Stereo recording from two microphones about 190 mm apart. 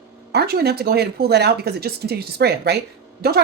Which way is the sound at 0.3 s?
60° right (ahead or behind).